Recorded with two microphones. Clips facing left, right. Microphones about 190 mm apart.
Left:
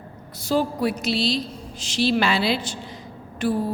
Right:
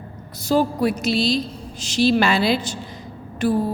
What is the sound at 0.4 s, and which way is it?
A woman's voice, 45° right (ahead or behind).